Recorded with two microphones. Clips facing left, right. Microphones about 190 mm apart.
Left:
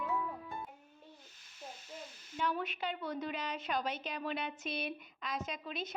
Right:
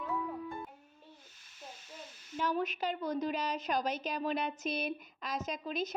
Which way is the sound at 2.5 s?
40° right (ahead or behind).